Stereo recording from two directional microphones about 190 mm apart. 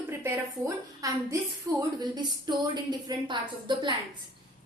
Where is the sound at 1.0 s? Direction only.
20° right (ahead or behind).